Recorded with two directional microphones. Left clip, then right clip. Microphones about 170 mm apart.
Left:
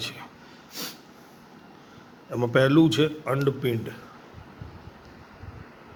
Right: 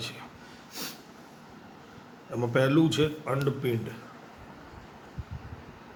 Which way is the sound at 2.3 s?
50° left (ahead or behind).